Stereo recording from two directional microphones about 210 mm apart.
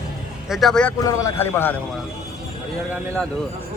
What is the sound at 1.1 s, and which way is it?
Speech, 15° left (ahead or behind).